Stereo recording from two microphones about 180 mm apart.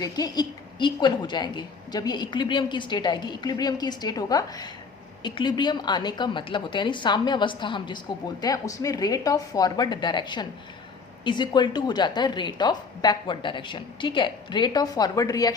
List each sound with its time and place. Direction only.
0.0 s a woman's voice: 20° left (ahead or behind)